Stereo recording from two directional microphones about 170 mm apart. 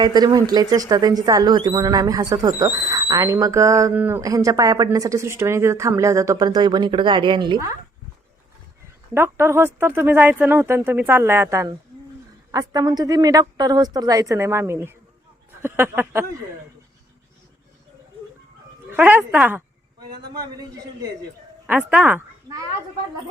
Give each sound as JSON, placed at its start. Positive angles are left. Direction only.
{"t": 0.0, "sound": "speech", "side_deg": -25}
{"t": 9.1, "sound": "speech", "side_deg": -15}
{"t": 18.9, "sound": "speech", "side_deg": -10}
{"t": 20.3, "sound": "speech", "side_deg": -20}
{"t": 21.7, "sound": "speech", "side_deg": -10}